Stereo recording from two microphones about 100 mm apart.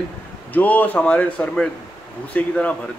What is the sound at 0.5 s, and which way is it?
Speech, 15° left (ahead or behind).